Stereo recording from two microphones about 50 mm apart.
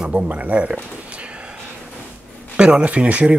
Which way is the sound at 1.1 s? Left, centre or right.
Right.